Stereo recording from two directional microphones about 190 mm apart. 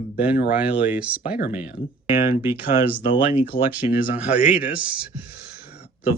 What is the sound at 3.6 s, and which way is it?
Speech, 10° right (ahead or behind).